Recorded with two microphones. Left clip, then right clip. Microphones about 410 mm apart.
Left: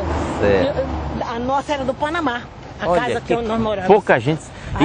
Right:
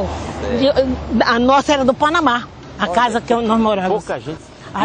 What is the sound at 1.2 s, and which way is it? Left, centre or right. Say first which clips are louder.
A man's voice: right 9 dB; right.